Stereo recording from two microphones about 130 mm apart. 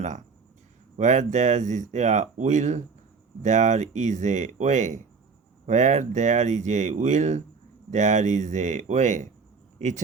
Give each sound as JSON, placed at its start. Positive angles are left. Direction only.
{"t": 0.9, "sound": "speech", "side_deg": -70}